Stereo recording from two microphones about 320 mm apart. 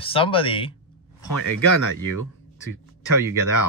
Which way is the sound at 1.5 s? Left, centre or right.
Right.